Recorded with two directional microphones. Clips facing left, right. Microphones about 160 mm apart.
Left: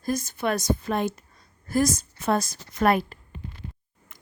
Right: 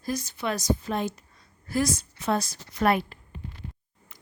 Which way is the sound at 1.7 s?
45° left (ahead or behind).